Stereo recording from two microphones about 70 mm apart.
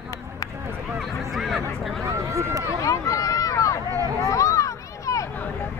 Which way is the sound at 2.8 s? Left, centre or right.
Left.